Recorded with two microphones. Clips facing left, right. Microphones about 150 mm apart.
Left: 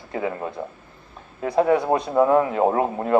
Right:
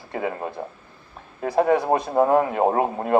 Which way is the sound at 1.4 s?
30° right (ahead or behind).